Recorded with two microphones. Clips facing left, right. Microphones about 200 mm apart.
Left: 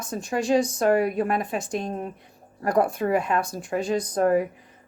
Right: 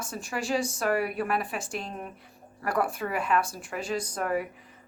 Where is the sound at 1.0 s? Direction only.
40° left (ahead or behind).